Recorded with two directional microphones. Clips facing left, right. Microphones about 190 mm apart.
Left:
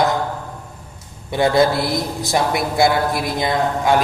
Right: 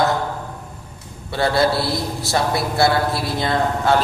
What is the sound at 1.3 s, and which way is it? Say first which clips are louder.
A man's voice: left 3 dB; 20° left (ahead or behind).